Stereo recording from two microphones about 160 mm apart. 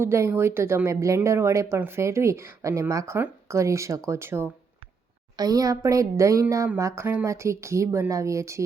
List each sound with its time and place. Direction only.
0.0 s a woman's voice: 15° right (ahead or behind)